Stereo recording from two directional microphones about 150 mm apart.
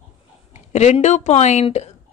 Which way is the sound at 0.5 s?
50° left (ahead or behind).